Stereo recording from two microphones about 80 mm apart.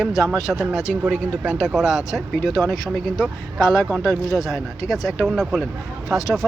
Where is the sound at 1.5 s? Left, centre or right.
Centre.